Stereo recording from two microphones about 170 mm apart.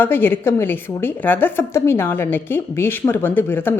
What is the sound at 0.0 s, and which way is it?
Speech, 10° left (ahead or behind).